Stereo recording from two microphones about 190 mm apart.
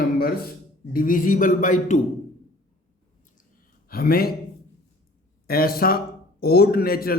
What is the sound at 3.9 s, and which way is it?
Speech, 55° left (ahead or behind).